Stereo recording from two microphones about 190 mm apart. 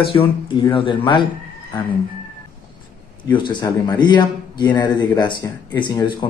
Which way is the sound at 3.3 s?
25° left (ahead or behind).